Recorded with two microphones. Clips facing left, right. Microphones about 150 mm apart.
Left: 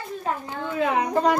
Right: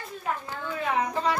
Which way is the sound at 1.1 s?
50° left (ahead or behind).